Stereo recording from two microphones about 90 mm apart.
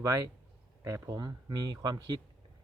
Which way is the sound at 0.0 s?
35° right (ahead or behind).